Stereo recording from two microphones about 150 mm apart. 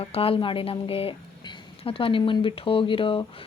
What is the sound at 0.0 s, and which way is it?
Speech, 40° left (ahead or behind).